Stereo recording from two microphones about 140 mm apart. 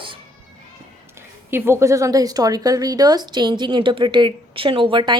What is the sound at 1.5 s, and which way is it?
Speech, 15° right (ahead or behind).